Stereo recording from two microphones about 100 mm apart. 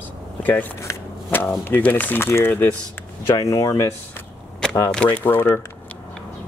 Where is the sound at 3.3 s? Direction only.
35° left (ahead or behind).